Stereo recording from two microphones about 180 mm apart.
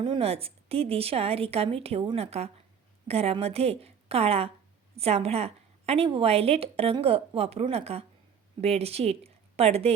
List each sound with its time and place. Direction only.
0.0 s a woman's voice: 30° right (ahead or behind)